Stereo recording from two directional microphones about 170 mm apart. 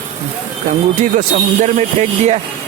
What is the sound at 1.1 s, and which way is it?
Speech, 50° right (ahead or behind).